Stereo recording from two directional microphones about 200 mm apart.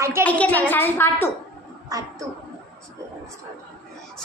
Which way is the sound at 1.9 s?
15° right (ahead or behind).